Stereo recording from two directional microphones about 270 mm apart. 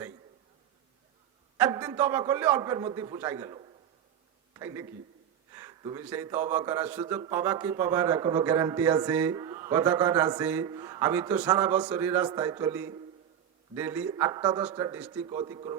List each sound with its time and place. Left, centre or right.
1.5 s a man's voice: centre